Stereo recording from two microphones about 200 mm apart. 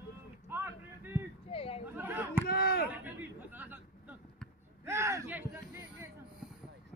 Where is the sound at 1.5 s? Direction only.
30° left (ahead or behind).